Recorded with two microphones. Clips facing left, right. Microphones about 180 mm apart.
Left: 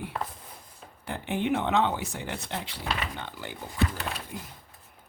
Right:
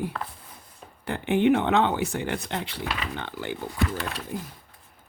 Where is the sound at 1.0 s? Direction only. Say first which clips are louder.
Right 8 dB; 65° right (ahead or behind).